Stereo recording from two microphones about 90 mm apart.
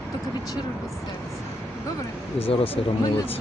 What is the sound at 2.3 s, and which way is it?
Speech, 90° left.